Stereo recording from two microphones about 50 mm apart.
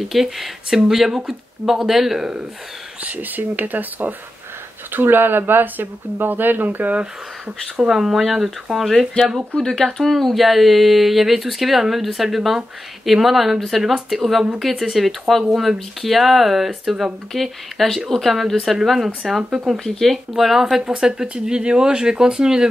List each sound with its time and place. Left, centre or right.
0.0 s speech: centre
3.0 s speech: right
7.7 s speech: centre
9.2 s speech: centre